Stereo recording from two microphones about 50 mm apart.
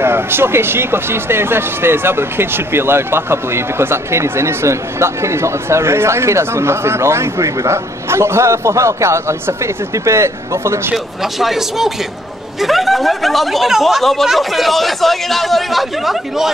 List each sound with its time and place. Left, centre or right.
0.0 s speech: right
11.3 s speech: centre